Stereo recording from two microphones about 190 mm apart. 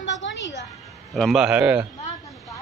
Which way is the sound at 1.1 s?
Centre (ahead or behind).